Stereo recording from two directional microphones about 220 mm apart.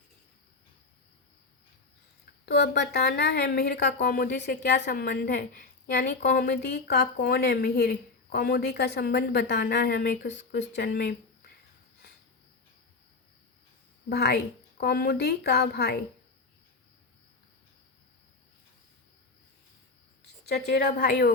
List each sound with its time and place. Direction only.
2.5 s a woman's voice: 50° left (ahead or behind)
14.1 s a woman's voice: 50° left (ahead or behind)
20.4 s a woman's voice: 45° left (ahead or behind)